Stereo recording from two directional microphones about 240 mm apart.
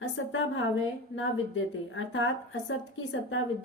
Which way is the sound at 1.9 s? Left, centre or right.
Left.